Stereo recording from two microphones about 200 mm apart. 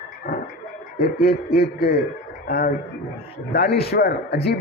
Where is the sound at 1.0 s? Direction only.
50° left (ahead or behind).